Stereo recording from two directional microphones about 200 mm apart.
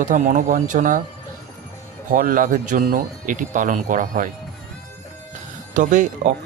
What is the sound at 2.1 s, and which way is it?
Speech, 45° right (ahead or behind).